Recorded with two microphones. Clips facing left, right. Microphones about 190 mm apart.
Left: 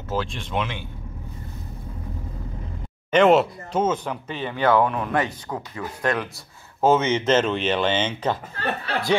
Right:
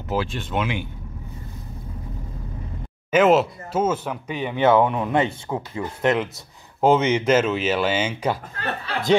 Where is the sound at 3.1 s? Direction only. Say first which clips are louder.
Even; centre (ahead or behind).